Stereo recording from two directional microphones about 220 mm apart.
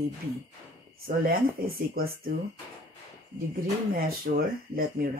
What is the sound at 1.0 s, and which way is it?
A woman's voice, 45° right (ahead or behind).